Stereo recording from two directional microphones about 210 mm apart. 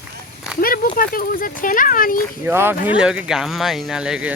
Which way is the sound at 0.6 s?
40° left (ahead or behind).